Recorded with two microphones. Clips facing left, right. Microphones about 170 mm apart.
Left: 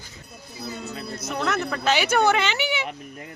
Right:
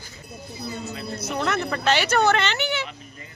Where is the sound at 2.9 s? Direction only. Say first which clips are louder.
Left 6 dB; 60° left (ahead or behind).